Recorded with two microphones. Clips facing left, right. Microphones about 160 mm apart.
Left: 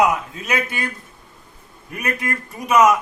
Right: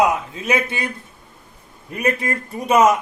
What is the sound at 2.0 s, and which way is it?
Speech, 25° right (ahead or behind).